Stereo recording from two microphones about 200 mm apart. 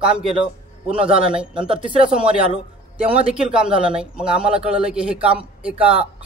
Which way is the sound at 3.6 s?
30° right (ahead or behind).